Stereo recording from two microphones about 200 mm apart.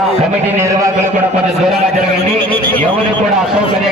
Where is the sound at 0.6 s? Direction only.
15° right (ahead or behind).